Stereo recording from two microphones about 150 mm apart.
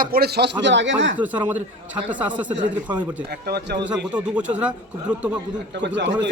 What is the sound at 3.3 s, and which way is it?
Speech, 90° right.